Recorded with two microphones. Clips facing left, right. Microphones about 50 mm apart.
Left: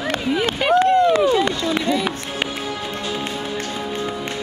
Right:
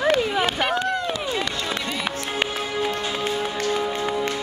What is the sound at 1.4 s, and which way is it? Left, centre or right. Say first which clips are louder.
Run: left 6 dB; left.